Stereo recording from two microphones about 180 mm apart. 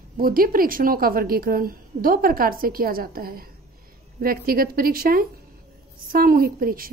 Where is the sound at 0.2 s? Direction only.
55° right (ahead or behind).